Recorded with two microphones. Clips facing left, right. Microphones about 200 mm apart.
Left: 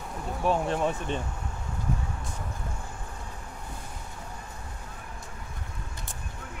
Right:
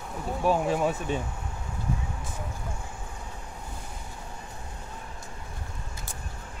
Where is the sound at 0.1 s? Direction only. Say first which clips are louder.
Right 2 dB; 5° right (ahead or behind).